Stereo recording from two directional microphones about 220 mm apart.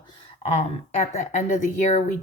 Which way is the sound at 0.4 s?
30° left (ahead or behind).